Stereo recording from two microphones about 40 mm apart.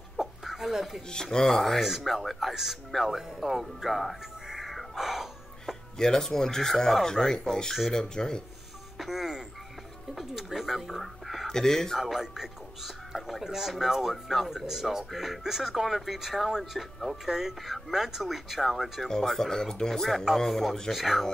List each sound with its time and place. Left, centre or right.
0.2 s a sound: centre
1.1 s speech: centre
1.8 s speech: centre
4.5 s music: centre
5.9 s speech: centre
7.1 s speech: centre
8.9 s speech: centre
11.5 s speech: centre
12.0 s speech: centre
19.0 s speech: centre